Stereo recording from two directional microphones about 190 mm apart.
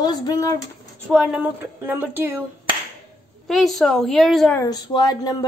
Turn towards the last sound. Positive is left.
turn(degrees=20)  # may be behind; listen again after turning